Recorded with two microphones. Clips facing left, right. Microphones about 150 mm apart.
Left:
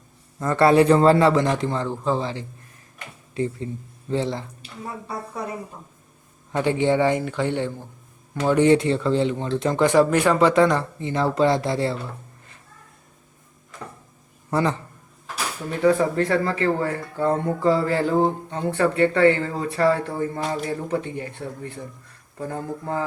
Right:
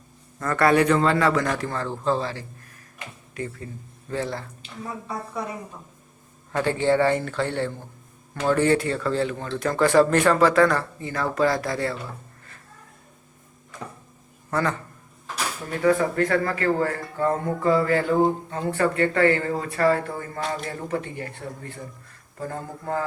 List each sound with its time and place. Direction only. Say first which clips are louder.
0.3 s speech: left 3 dB; 25° left (ahead or behind)
6.6 s a man's voice: left 1 dB; 15° left (ahead or behind)
14.5 s speech: left 3 dB; 25° left (ahead or behind)
15.8 s a man's voice: left 2 dB; 25° left (ahead or behind)